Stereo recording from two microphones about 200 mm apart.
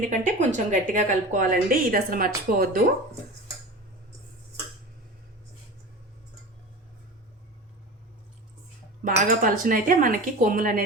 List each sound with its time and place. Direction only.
0.1 s a woman's voice: 40° right (ahead or behind)
9.0 s a woman's voice: 45° right (ahead or behind)